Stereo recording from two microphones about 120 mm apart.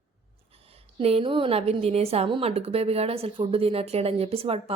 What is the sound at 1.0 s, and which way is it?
Speech, 55° right (ahead or behind).